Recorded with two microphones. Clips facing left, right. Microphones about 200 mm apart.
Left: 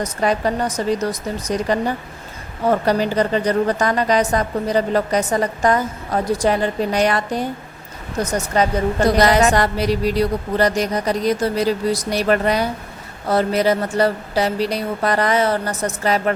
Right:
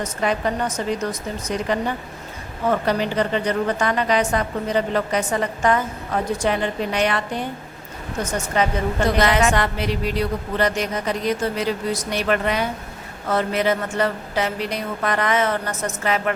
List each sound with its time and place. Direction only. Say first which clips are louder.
0.0 s a woman's voice: left 3 dB; 40° left (ahead or behind)